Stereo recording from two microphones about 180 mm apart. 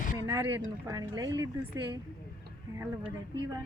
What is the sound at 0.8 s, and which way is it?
Speech, 20° right (ahead or behind).